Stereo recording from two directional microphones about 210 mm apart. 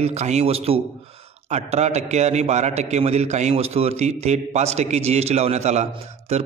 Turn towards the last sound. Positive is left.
turn(degrees=-30)  # may be behind; listen again after turning